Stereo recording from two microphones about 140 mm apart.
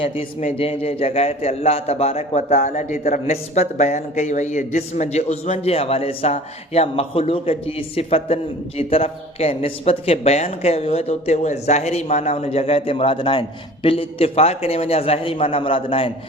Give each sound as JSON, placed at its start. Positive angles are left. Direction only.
{"t": 0.0, "sound": "speech", "side_deg": 45}